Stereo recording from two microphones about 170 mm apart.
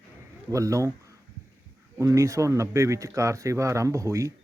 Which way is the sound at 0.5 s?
20° right (ahead or behind).